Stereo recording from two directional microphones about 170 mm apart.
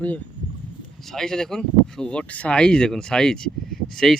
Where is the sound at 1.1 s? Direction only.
5° left (ahead or behind).